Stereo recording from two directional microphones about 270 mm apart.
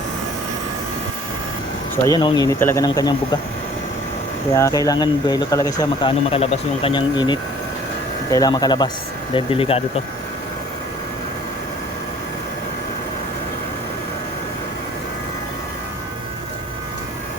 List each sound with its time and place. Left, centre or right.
2.0 s speech: centre
4.5 s speech: centre